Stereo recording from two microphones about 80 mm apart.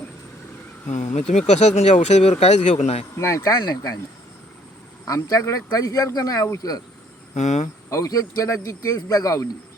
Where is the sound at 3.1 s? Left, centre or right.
Left.